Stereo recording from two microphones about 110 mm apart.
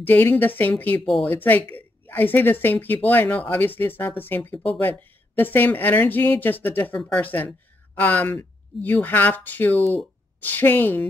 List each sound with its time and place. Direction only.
0.0 s a woman's voice: 15° left (ahead or behind)